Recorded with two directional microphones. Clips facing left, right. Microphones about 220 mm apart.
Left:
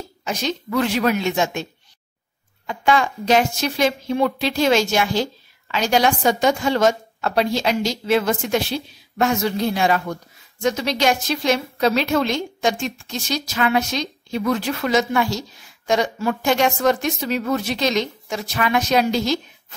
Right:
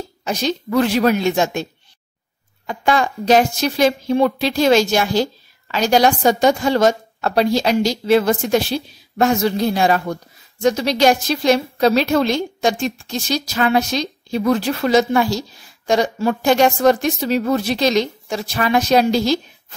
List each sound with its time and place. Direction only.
0.2 s a woman's voice: 35° right (ahead or behind)